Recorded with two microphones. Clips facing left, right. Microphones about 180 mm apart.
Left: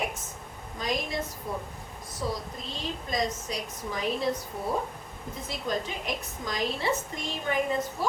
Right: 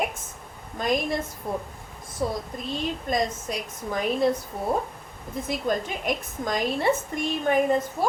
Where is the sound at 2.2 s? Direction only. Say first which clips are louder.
Right 5 dB; 55° right (ahead or behind).